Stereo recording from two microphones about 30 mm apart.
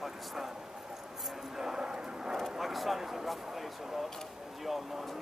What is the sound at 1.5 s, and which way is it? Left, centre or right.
Speech, centre.